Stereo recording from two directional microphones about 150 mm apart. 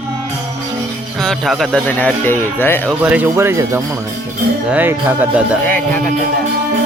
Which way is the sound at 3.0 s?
10° right (ahead or behind).